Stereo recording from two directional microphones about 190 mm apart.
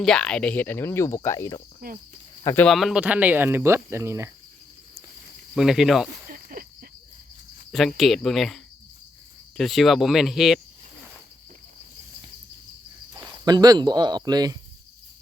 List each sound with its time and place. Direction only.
0.0 s speech: 5° left (ahead or behind)
2.6 s speech: centre (ahead or behind)
5.5 s speech: centre (ahead or behind)
6.3 s cricket: 50° right (ahead or behind)
7.7 s speech: centre (ahead or behind)
13.1 s speech: 20° right (ahead or behind)